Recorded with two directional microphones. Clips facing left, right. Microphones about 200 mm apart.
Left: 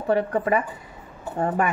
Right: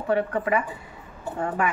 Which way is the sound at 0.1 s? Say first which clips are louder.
Left 2 dB; 40° left (ahead or behind).